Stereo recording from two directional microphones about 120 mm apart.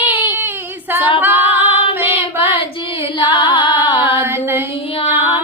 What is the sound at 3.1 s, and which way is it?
Carnatic music, 45° left (ahead or behind).